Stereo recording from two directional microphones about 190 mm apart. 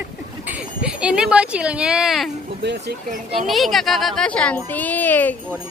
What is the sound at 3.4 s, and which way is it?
Speech, centre (ahead or behind).